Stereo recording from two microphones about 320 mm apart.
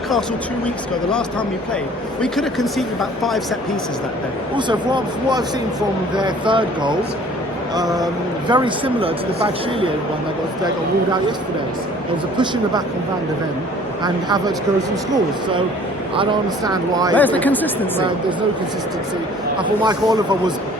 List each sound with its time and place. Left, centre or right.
2.2 s speech: centre
4.5 s speech: centre
14.0 s speech: centre
16.6 s speech: centre
17.2 s speech: centre
19.5 s speech: centre